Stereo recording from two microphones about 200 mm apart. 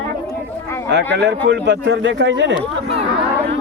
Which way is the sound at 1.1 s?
60° right (ahead or behind).